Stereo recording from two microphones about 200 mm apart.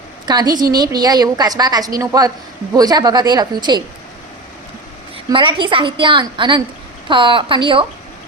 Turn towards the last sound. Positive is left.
turn(degrees=-25)  # may be behind; listen again after turning